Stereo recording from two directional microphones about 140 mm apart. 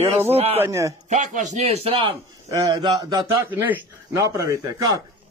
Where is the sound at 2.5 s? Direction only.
25° right (ahead or behind).